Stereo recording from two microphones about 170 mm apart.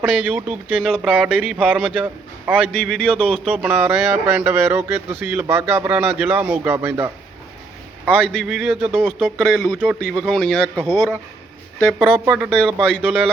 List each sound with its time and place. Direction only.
0.0 s speech: 10° right (ahead or behind)
8.2 s speech: centre (ahead or behind)
11.9 s speech: centre (ahead or behind)